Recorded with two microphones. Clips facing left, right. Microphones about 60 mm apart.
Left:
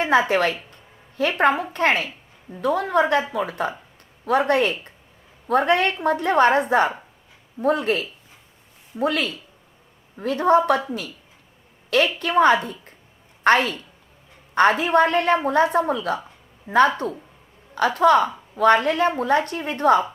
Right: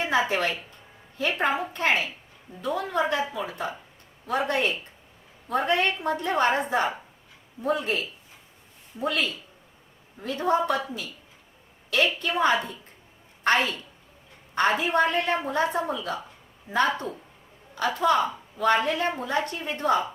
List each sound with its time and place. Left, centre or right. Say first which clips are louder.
0.0 s a woman's voice: left 6 dB; left
12.2 s a woman's voice: left 6 dB; left